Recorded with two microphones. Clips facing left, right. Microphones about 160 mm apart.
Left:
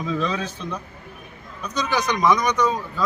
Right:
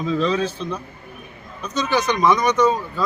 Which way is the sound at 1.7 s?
15° left (ahead or behind).